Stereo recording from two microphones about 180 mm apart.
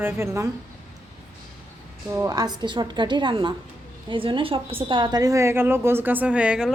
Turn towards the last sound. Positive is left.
turn(degrees=-5)  # may be behind; listen again after turning